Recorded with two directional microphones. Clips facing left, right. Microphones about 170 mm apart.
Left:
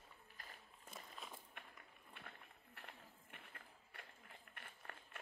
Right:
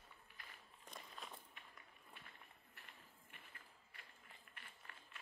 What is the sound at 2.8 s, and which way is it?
Run, 60° left (ahead or behind).